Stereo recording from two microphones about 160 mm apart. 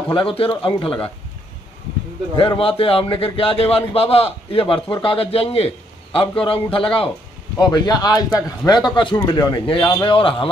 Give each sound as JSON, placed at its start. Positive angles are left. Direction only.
{"t": 0.1, "sound": "a man's voice", "side_deg": 35}
{"t": 2.3, "sound": "a man's voice", "side_deg": 30}
{"t": 9.8, "sound": "a man's voice", "side_deg": 15}
{"t": 10.0, "sound": "a man's voice", "side_deg": 35}